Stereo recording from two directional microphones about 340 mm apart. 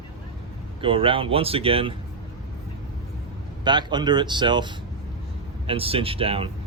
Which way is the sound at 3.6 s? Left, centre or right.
Centre.